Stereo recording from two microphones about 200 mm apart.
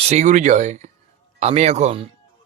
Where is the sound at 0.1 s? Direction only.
35° right (ahead or behind).